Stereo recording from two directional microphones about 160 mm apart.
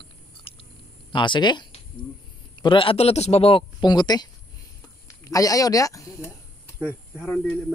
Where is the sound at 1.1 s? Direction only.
30° left (ahead or behind).